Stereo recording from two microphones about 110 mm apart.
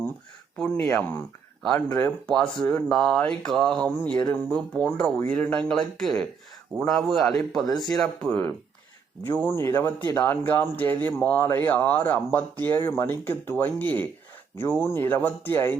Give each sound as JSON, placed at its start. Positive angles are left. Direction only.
{"t": 0.8, "sound": "speech", "side_deg": 15}
{"t": 8.3, "sound": "speech", "side_deg": 20}